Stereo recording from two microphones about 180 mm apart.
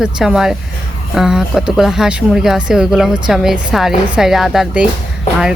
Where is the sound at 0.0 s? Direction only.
5° right (ahead or behind).